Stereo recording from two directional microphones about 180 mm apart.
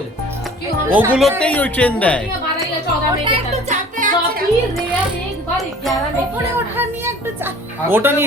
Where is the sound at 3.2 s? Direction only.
35° right (ahead or behind).